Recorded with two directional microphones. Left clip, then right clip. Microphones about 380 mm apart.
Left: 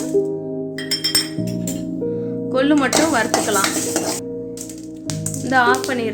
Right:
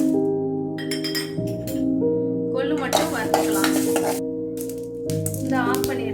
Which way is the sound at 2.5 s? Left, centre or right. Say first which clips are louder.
Left 7 dB; left.